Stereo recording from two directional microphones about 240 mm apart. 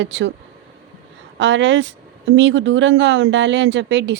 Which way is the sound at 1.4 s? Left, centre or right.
Right.